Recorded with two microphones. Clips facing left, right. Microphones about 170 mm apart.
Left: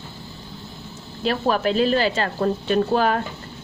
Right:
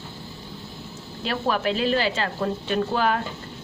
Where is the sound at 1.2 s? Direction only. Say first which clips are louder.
Left 4 dB; 40° left (ahead or behind).